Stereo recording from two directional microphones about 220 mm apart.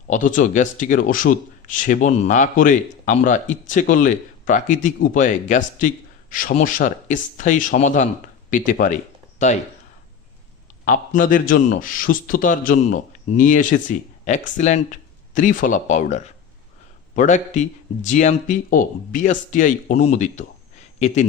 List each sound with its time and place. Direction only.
0.1 s a man's voice: 35° left (ahead or behind)
10.8 s a man's voice: 40° left (ahead or behind)